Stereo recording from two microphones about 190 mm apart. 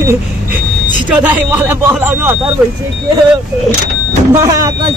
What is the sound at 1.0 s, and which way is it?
Speech, 10° right (ahead or behind).